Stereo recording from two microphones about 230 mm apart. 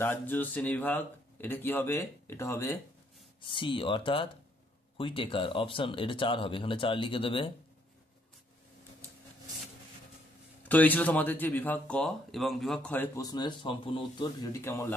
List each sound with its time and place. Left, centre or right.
0.0 s speech: centre
10.7 s speech: centre